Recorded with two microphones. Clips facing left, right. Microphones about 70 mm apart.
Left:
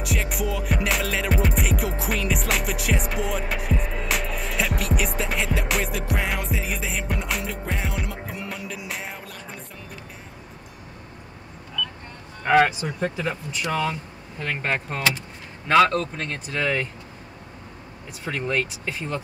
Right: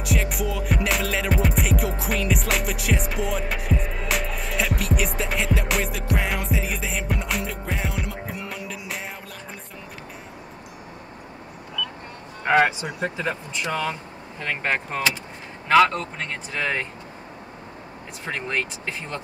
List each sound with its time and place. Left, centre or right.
0.0 s music: centre
11.8 s vehicle: centre
12.4 s speech: centre
18.3 s speech: centre